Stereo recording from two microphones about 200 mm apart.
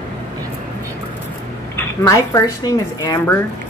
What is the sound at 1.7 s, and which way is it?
Speech, 15° left (ahead or behind).